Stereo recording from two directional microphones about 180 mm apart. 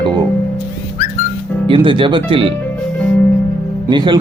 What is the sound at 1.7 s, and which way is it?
Speech, 30° right (ahead or behind).